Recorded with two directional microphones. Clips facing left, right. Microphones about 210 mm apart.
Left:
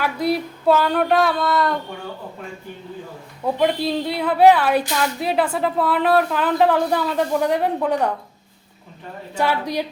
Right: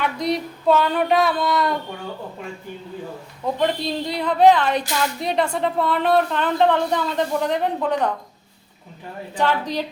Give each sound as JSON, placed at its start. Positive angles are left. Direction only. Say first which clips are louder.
{"t": 0.0, "sound": "a woman's voice", "louder": "left 2 dB", "side_deg": 5}
{"t": 3.4, "sound": "a woman's voice", "louder": "left 2 dB", "side_deg": 5}
{"t": 9.3, "sound": "a woman's voice", "louder": "left 1 dB", "side_deg": 10}